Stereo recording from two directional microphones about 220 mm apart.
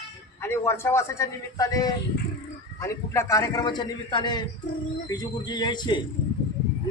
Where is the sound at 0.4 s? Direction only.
10° left (ahead or behind).